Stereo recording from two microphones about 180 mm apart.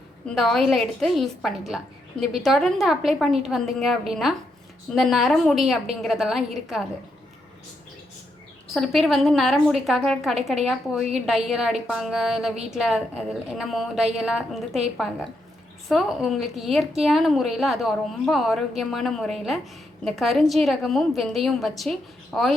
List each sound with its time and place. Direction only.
0.3 s a woman's voice: centre (ahead or behind)
8.6 s a woman's voice: centre (ahead or behind)